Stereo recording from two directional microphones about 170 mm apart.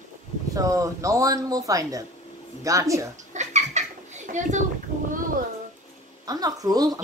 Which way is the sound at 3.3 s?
45° right (ahead or behind).